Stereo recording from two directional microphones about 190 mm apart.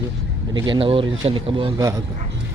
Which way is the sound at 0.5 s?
25° right (ahead or behind).